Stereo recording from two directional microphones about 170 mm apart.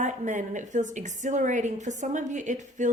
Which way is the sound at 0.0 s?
45° right (ahead or behind).